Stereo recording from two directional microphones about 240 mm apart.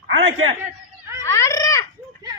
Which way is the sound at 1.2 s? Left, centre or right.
Centre.